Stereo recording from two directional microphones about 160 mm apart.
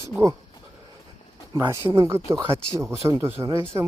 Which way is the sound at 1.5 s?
15° right (ahead or behind).